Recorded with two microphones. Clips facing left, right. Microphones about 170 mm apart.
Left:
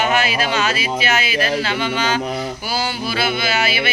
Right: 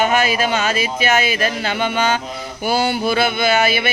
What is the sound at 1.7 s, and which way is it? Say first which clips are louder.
Mantra: right 1 dB; 50° right (ahead or behind).